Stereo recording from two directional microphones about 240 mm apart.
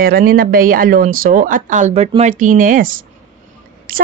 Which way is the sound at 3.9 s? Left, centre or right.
Right.